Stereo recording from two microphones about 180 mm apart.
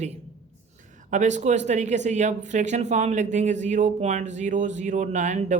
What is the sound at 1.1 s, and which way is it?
Speech, 40° right (ahead or behind).